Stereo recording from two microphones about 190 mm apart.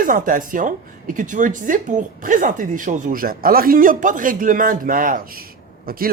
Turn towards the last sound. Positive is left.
turn(degrees=-50)  # may be behind; listen again after turning